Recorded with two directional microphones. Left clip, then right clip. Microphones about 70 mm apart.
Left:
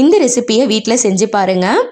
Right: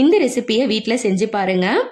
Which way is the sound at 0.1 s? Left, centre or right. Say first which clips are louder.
Left 5 dB; left.